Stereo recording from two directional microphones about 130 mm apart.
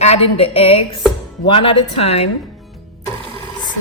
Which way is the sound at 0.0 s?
50° left (ahead or behind).